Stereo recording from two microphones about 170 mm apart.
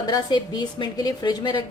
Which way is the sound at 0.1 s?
25° left (ahead or behind).